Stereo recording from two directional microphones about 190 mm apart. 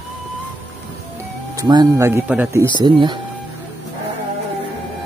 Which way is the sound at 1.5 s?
20° right (ahead or behind).